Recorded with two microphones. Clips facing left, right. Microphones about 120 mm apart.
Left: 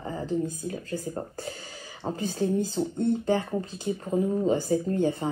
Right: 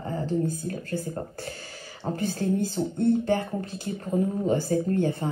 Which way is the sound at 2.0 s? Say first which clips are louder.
Even; 20° left (ahead or behind).